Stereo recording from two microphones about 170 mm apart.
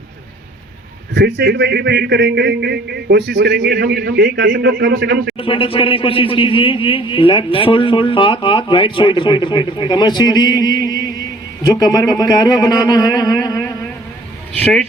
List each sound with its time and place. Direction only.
1.1 s a man's voice: 85° right
5.4 s a man's voice: 30° left (ahead or behind)
14.5 s speech: 5° left (ahead or behind)